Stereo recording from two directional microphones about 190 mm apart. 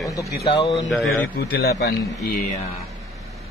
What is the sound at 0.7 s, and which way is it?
Speech, centre (ahead or behind).